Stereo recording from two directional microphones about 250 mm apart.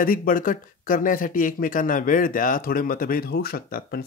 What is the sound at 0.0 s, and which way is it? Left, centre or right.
Speech, left.